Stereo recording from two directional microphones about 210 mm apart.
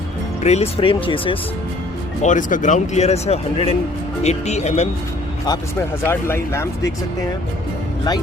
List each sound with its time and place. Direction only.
0.4 s speech: 30° left (ahead or behind)
2.2 s speech: 35° left (ahead or behind)
6.1 s speech: 10° left (ahead or behind)